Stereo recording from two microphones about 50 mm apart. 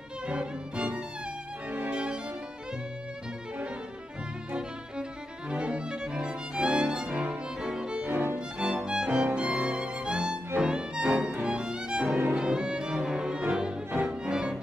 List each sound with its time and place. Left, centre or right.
0.3 s violin: right
1.7 s music: right
5.5 s music: right
12.4 s violin: centre
14.2 s music: centre